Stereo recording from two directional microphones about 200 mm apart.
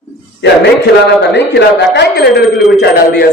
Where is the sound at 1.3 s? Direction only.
60° left (ahead or behind).